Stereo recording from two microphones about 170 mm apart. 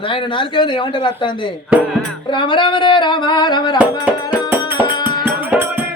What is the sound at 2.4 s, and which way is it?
Speech, 30° left (ahead or behind).